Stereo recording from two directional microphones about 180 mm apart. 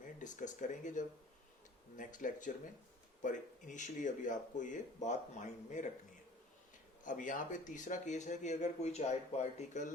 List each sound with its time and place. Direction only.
0.2 s speech: 45° left (ahead or behind)
7.0 s speech: 45° left (ahead or behind)